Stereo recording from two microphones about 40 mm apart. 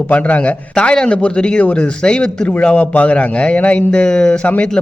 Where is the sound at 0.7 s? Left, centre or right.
Left.